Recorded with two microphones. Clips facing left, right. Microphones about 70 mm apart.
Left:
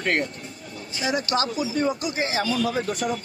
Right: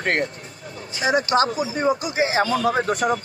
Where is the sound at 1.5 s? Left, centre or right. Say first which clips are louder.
Right 2 dB; right.